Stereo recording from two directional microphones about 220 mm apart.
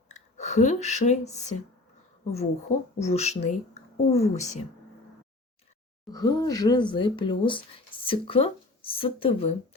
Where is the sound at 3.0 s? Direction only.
30° left (ahead or behind).